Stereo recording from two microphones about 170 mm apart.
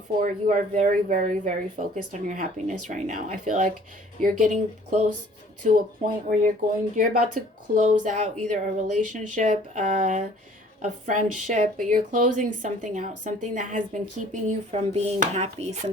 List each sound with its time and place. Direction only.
0.2 s speech: 50° right (ahead or behind)
14.4 s dishes: 40° right (ahead or behind)